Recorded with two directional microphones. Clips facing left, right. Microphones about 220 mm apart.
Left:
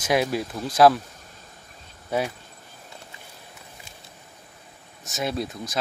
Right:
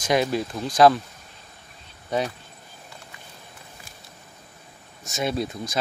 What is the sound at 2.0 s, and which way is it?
Speech, 10° left (ahead or behind).